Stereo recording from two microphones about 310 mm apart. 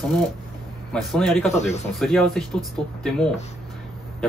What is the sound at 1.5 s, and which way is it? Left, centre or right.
Speech, left.